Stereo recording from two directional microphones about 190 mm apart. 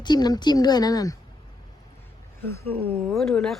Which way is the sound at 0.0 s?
20° left (ahead or behind).